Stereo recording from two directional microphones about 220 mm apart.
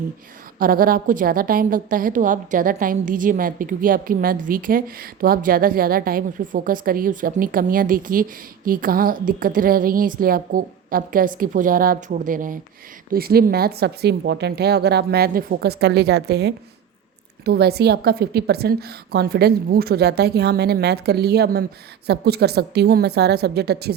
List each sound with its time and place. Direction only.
0.6 s a woman's voice: 40° right (ahead or behind)